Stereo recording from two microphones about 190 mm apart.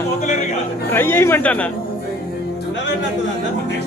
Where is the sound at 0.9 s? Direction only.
10° left (ahead or behind).